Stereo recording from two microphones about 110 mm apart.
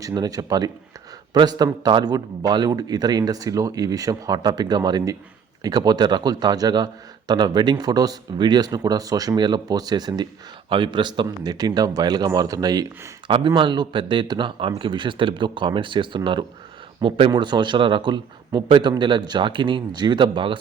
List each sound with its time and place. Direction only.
0.0 s a man's voice: 35° right (ahead or behind)
11.3 s a man's voice: 35° right (ahead or behind)
13.2 s speech: 50° right (ahead or behind)